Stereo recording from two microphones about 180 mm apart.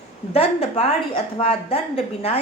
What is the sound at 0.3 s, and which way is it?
A woman's voice, 35° left (ahead or behind).